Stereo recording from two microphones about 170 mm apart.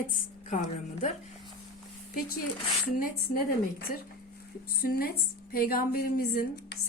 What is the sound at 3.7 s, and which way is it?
A woman's voice, 65° left (ahead or behind).